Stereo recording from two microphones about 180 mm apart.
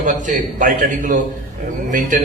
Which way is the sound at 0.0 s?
45° right (ahead or behind).